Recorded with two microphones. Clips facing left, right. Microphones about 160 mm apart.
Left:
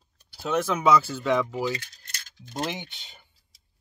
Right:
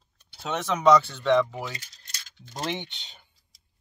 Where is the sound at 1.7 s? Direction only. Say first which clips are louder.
Left 7 dB; 55° left (ahead or behind).